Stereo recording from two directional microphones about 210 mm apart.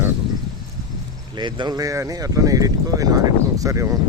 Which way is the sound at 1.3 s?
20° right (ahead or behind).